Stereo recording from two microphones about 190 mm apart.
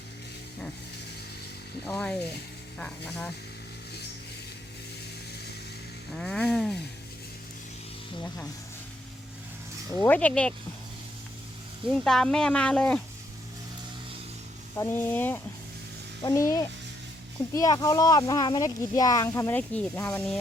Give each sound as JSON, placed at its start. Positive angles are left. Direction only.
{"t": 1.8, "sound": "speech", "side_deg": 5}
{"t": 6.1, "sound": "speech", "side_deg": 5}
{"t": 10.0, "sound": "speech", "side_deg": 10}
{"t": 11.9, "sound": "speech", "side_deg": 0}
{"t": 14.8, "sound": "speech", "side_deg": 10}